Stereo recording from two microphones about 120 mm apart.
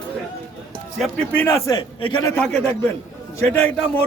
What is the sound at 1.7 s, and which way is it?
Speech, 40° left (ahead or behind).